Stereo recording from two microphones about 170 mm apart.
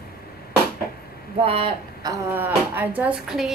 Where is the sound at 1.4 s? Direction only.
35° right (ahead or behind).